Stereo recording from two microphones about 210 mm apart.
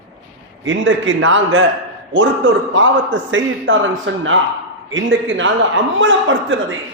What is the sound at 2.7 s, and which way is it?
A man's voice, 65° right (ahead or behind).